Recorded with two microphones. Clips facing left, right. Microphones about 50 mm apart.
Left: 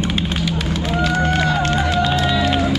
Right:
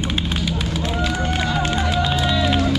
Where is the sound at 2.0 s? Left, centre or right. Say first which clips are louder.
Left 3 dB; centre.